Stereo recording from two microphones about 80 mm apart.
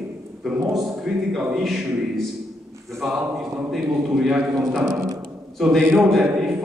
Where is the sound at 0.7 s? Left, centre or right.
Centre.